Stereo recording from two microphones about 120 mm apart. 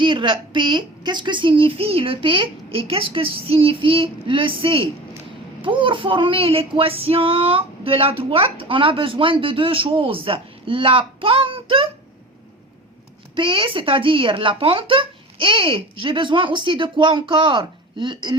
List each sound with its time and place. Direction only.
0.0 s female singing: 45° right (ahead or behind)
13.3 s female singing: 45° right (ahead or behind)